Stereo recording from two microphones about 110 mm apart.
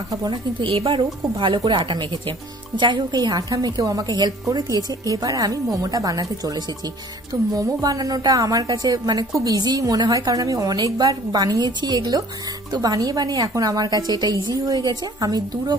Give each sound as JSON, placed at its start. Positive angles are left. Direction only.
{"t": 0.3, "sound": "a woman's voice", "side_deg": -50}